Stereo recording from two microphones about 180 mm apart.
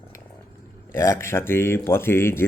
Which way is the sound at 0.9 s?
15° left (ahead or behind).